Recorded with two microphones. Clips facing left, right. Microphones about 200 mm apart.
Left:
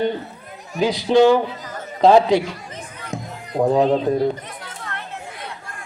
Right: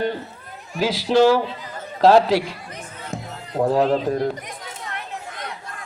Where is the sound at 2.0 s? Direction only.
Centre (ahead or behind).